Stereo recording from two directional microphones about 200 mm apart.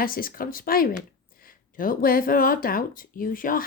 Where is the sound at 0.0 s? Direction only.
45° left (ahead or behind).